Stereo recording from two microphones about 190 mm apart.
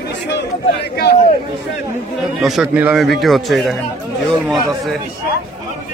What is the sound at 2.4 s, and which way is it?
A man's voice, centre (ahead or behind).